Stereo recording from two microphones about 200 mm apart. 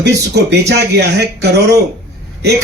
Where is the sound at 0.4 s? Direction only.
55° right (ahead or behind).